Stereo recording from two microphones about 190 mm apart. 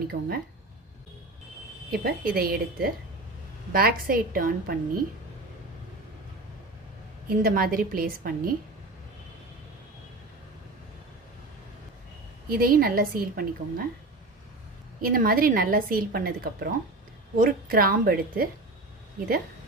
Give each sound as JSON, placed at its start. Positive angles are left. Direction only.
{"t": 0.1, "sound": "speech", "side_deg": -55}
{"t": 1.9, "sound": "speech", "side_deg": -55}
{"t": 7.3, "sound": "speech", "side_deg": -50}
{"t": 12.5, "sound": "speech", "side_deg": -50}
{"t": 15.0, "sound": "speech", "side_deg": -50}